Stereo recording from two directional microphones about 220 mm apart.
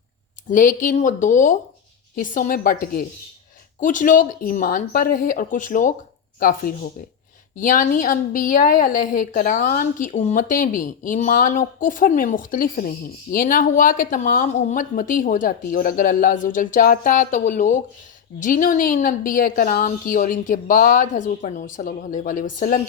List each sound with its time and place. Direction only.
0.5 s a woman's voice: 35° left (ahead or behind)